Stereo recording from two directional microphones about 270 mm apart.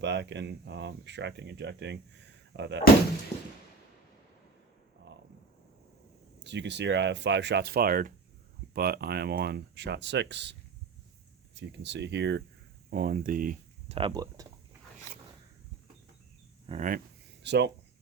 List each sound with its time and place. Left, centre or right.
0.0 s speech: right
3.3 s a sound: left
5.1 s a sound: right
6.4 s speech: right; by 14.4 s centre
16.6 s speech: right
17.4 s speech: right